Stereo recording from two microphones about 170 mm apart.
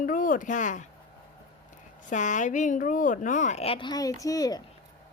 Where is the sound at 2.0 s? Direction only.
45° left (ahead or behind); by 4.6 s 20° left (ahead or behind).